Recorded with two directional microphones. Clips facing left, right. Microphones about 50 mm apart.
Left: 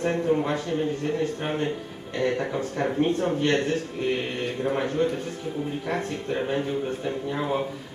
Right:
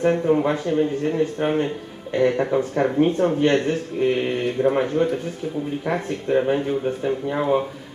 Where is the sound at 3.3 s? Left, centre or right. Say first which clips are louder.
Right 4 dB; centre.